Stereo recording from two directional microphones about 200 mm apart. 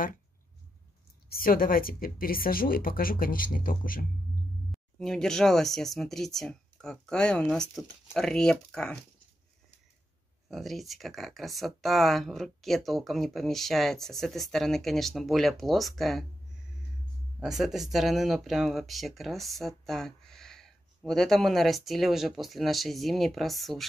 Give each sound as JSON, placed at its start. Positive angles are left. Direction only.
{"t": 1.3, "sound": "speech", "side_deg": 45}
{"t": 4.9, "sound": "speech", "side_deg": 0}
{"t": 10.5, "sound": "speech", "side_deg": 0}